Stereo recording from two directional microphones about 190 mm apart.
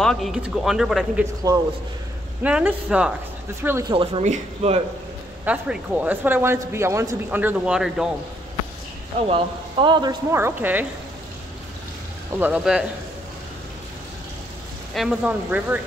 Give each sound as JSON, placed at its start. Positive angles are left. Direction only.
{"t": 0.0, "sound": "a man's voice", "side_deg": 0}
{"t": 1.4, "sound": "speech", "side_deg": -20}
{"t": 2.4, "sound": "a man's voice", "side_deg": -5}
{"t": 3.9, "sound": "speech", "side_deg": -30}
{"t": 5.4, "sound": "speech", "side_deg": -5}
{"t": 9.3, "sound": "speech", "side_deg": -25}
{"t": 12.4, "sound": "a man's voice", "side_deg": -5}
{"t": 15.0, "sound": "speech", "side_deg": -5}